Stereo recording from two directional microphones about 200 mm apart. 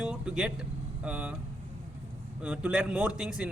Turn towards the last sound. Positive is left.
turn(degrees=-5)  # may be behind; listen again after turning